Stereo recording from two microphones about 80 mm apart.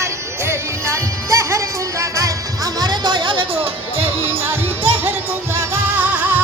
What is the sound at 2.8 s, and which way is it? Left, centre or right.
Music, right.